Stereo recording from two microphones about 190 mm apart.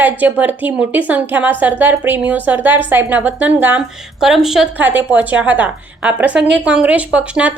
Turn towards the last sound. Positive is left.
turn(degrees=-5)  # may be behind; listen again after turning